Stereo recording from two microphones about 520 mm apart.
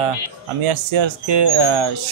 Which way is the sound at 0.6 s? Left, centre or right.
Right.